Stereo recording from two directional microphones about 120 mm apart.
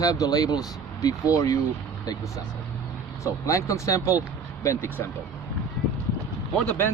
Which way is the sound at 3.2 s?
25° left (ahead or behind).